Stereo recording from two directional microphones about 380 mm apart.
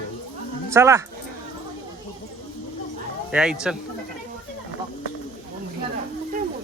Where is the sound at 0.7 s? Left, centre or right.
Centre.